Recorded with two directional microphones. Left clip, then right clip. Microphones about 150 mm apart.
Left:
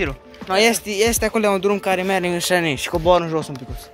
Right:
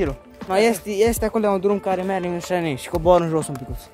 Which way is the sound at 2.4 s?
Centre (ahead or behind).